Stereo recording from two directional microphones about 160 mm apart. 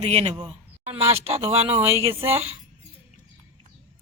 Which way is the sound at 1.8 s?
15° right (ahead or behind).